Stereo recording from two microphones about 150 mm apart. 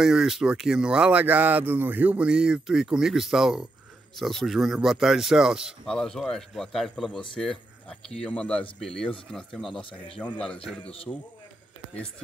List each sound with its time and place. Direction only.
0.0 s speech: 5° right (ahead or behind)
10.8 s a man's voice: 40° left (ahead or behind)